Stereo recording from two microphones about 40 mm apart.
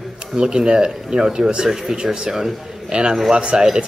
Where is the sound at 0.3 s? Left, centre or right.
Centre.